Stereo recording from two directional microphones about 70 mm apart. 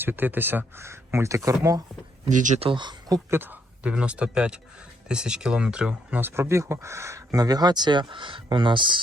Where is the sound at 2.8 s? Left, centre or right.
Right.